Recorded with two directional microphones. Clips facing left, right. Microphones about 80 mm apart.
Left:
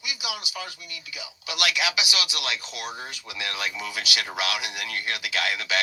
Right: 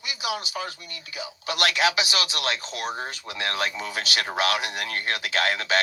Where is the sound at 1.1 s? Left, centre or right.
Right.